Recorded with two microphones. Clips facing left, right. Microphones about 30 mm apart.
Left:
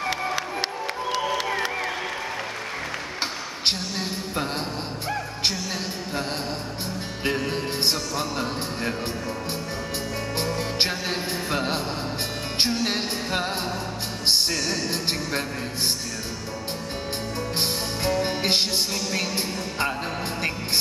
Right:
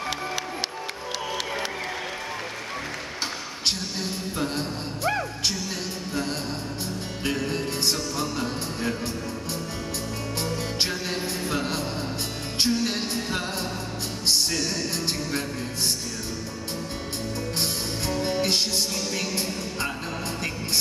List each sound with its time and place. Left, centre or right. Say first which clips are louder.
3.6 s a sound: left 2 dB; left
7.2 s music: left 2 dB; left
10.5 s music: left 2 dB; left
14.7 s music: left 2 dB; left
17.6 s music: left 2 dB; left